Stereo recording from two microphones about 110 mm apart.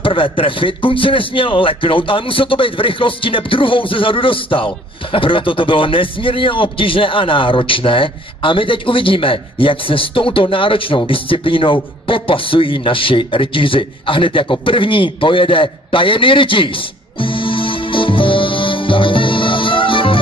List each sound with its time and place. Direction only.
0.0 s a man's voice: 50° left (ahead or behind)
17.2 s music: 50° left (ahead or behind)